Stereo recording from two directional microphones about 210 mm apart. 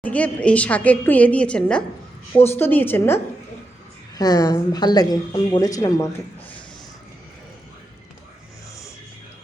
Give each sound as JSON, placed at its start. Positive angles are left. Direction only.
{"t": 0.0, "sound": "a woman's voice", "side_deg": 5}
{"t": 4.2, "sound": "a woman's voice", "side_deg": 15}